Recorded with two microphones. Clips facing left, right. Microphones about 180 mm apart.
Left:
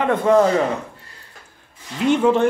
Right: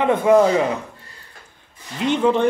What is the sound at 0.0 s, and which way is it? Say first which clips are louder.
Speech: right 1 dB; 10° right (ahead or behind).